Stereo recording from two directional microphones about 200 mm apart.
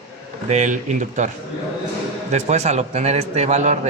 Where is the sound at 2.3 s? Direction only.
35° right (ahead or behind).